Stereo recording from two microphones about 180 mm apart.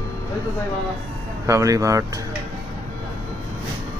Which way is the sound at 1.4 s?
15° right (ahead or behind).